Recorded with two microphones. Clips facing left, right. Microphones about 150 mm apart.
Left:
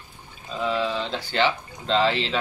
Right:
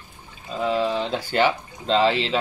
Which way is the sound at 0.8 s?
10° right (ahead or behind).